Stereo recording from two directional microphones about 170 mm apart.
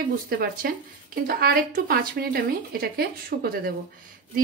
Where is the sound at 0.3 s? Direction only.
60° right (ahead or behind).